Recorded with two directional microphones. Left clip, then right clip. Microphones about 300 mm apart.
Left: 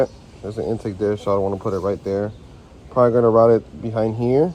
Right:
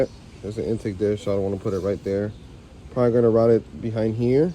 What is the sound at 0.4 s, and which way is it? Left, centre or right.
Speech, centre.